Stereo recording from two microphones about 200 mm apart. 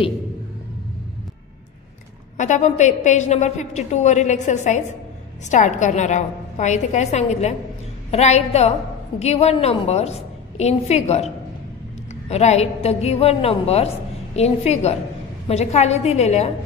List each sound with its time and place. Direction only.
2.3 s a woman's voice: 35° left (ahead or behind)